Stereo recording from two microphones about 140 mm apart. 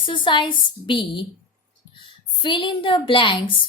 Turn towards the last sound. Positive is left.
turn(degrees=35)  # may be behind; listen again after turning